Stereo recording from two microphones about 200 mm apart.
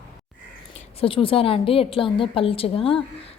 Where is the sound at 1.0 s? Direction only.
25° left (ahead or behind).